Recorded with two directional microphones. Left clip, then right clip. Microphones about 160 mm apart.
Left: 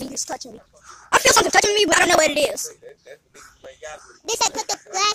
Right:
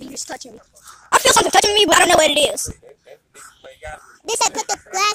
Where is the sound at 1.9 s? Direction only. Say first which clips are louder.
Right 4 dB; 15° right (ahead or behind).